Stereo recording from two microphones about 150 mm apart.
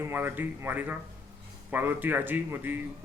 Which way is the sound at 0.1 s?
15° right (ahead or behind).